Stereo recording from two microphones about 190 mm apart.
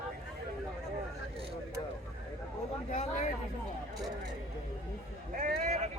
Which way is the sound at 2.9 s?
40° left (ahead or behind).